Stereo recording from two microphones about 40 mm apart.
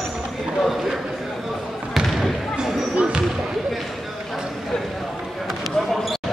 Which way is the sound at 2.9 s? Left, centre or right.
Right.